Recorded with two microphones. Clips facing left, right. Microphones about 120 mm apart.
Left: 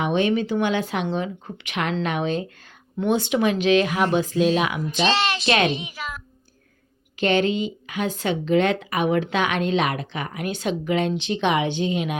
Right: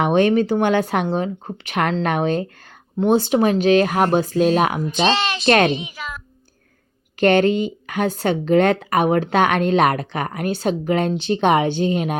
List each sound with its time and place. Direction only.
0.0 s speech: 50° right (ahead or behind)
7.2 s speech: 50° right (ahead or behind)